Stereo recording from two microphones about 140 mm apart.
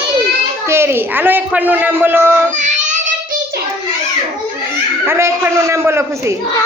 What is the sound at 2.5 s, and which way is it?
Child singing, 65° right (ahead or behind).